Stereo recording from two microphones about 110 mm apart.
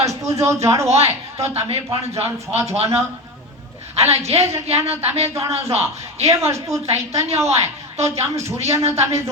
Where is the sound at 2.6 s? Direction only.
70° right (ahead or behind).